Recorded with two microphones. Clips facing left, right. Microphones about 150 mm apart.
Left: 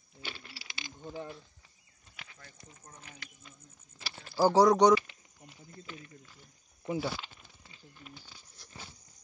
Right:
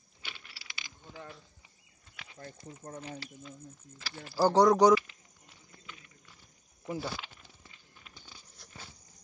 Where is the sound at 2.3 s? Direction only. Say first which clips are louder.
Right 9 dB; 40° right (ahead or behind).